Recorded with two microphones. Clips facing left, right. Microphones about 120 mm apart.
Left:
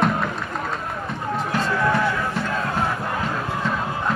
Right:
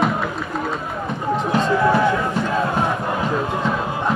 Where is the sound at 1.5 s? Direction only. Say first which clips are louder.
Right 5 dB; 20° right (ahead or behind).